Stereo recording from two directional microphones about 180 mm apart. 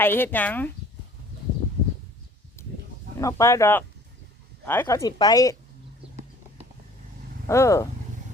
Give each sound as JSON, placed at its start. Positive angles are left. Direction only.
{"t": 0.0, "sound": "speech", "side_deg": 10}
{"t": 3.2, "sound": "speech", "side_deg": 15}
{"t": 7.4, "sound": "speech", "side_deg": 15}